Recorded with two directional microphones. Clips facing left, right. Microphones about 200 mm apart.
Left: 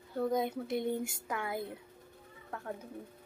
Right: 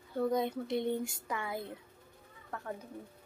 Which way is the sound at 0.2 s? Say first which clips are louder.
Even; centre (ahead or behind).